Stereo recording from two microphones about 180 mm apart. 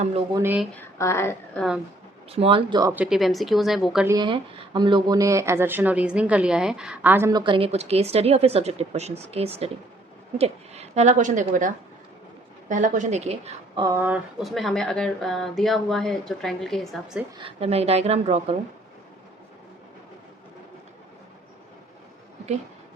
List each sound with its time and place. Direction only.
0.3 s speech: 10° right (ahead or behind)
0.8 s a woman's voice: 15° left (ahead or behind)
2.3 s speech: 30° right (ahead or behind)
2.9 s speech: 5° right (ahead or behind)
4.0 s a woman's voice: 20° right (ahead or behind)
13.8 s speech: 15° right (ahead or behind)
17.4 s a woman's voice: 35° right (ahead or behind)